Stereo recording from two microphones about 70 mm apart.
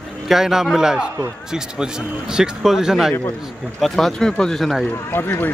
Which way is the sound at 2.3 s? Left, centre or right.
Centre.